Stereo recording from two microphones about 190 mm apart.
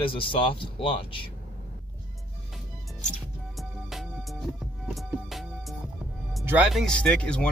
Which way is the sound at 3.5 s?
Centre (ahead or behind).